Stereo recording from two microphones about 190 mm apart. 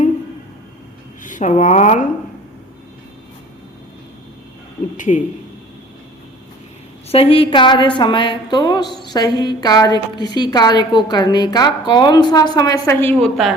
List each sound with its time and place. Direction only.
1.2 s speech: 40° left (ahead or behind)
4.9 s a man's voice: 40° left (ahead or behind)
7.1 s a woman's voice: 30° left (ahead or behind); by 13.3 s 10° left (ahead or behind)